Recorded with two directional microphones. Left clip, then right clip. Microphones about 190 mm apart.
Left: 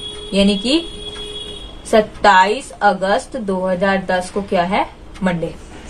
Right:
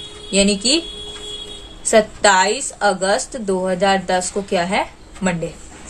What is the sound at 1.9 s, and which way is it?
A woman's voice, 30° right (ahead or behind).